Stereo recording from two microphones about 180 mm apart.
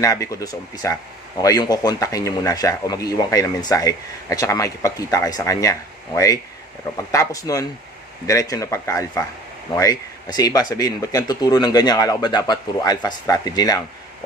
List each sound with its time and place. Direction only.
0.0 s speech: 20° left (ahead or behind)